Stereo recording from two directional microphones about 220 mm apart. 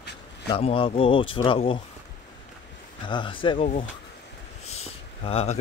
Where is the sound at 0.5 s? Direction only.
25° left (ahead or behind).